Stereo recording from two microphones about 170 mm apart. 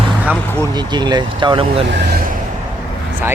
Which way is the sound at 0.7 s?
25° right (ahead or behind).